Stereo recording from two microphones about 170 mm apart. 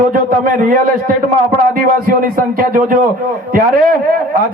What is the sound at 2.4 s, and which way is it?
Speech, 55° right (ahead or behind).